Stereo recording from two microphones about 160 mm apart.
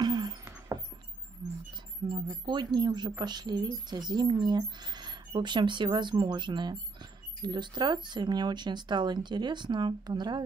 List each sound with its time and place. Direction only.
0.0 s rodents: 25° right (ahead or behind)
2.4 s speech: 30° right (ahead or behind)